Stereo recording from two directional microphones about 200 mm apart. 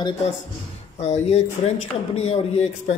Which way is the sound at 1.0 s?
35° left (ahead or behind).